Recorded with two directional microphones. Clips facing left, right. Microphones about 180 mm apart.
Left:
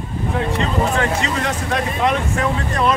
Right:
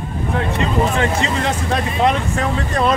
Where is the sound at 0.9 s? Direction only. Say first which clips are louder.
Right 1 dB; 30° right (ahead or behind).